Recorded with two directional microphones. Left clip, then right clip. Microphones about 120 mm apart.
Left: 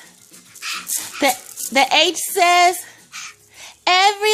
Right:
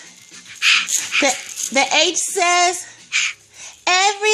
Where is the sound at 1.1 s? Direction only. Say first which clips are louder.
Even; 10° left (ahead or behind).